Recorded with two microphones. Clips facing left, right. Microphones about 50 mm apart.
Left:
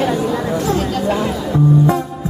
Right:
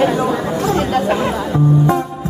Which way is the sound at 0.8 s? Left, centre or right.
Right.